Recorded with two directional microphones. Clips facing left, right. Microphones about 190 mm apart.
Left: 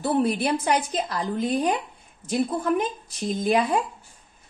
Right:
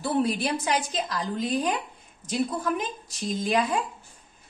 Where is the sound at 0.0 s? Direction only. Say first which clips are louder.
Left 3 dB; 50° left (ahead or behind).